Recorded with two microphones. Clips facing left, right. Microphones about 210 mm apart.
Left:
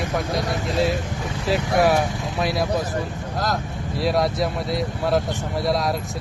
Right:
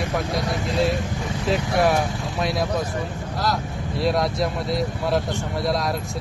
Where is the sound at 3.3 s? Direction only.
45° left (ahead or behind).